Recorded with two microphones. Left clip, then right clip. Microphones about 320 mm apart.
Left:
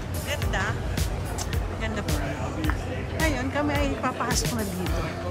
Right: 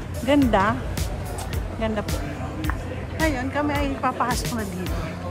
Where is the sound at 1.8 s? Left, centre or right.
Centre.